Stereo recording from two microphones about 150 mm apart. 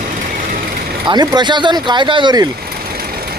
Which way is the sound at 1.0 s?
30° right (ahead or behind).